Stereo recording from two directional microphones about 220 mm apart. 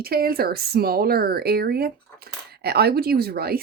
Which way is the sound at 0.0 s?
45° right (ahead or behind).